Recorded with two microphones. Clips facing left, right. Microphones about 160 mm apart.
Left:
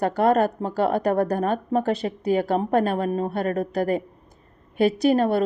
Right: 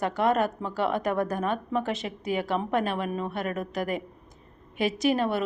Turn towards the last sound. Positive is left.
turn(degrees=45)  # may be behind; listen again after turning